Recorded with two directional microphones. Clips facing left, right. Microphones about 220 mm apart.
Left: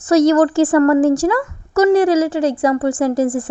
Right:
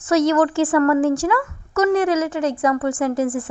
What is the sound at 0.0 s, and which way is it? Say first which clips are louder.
A woman's voice: left 5 dB; 40° left (ahead or behind).